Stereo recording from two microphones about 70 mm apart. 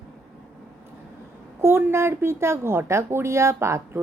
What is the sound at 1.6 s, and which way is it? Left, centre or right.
Speech, right.